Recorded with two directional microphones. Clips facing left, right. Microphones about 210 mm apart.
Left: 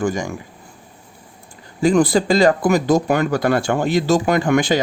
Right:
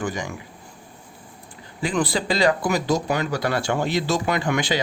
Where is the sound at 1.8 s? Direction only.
45° left (ahead or behind).